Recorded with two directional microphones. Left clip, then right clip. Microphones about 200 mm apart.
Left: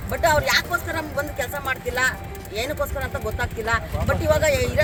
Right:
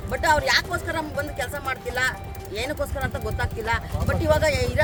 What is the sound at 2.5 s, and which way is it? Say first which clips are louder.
Speech: left 2 dB; 5° right (ahead or behind).